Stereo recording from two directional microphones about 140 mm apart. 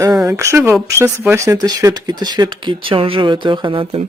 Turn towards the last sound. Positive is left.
turn(degrees=-35)  # may be behind; listen again after turning